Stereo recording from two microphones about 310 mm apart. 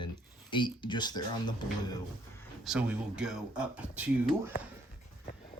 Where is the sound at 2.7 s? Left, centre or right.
Centre.